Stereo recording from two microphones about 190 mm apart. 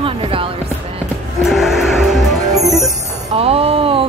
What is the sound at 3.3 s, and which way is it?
Music, 30° right (ahead or behind).